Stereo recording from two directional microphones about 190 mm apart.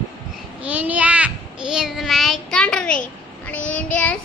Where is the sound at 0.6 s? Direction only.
5° right (ahead or behind).